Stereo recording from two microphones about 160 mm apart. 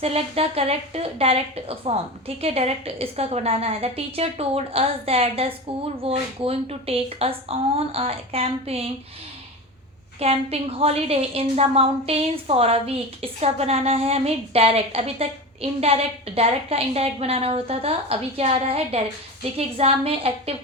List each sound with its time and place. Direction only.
0.0 s a woman's voice: 40° right (ahead or behind)
10.2 s a woman's voice: 40° right (ahead or behind)